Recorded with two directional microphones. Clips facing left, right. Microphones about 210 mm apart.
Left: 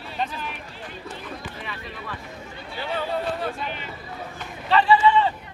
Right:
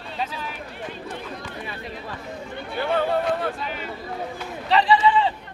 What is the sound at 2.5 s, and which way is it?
Speech, 55° right (ahead or behind).